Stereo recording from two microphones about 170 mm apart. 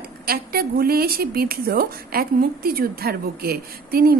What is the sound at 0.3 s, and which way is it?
A woman's voice, 60° right (ahead or behind).